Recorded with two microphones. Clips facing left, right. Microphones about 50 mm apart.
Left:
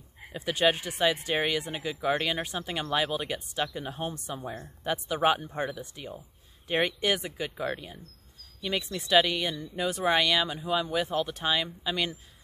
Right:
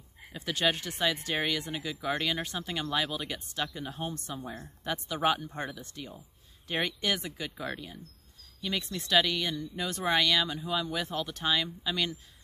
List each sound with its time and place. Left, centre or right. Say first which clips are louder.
0.3 s speech: left 4 dB; centre